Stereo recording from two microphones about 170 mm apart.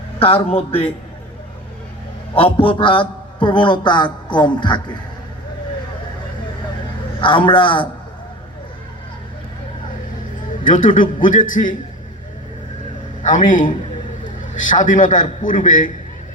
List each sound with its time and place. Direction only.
0.2 s a man's voice: 35° left (ahead or behind)
2.3 s a man's voice: 30° left (ahead or behind)
7.2 s a man's voice: 30° left (ahead or behind)
10.6 s a man's voice: 50° left (ahead or behind)
13.5 s a man's voice: 50° left (ahead or behind)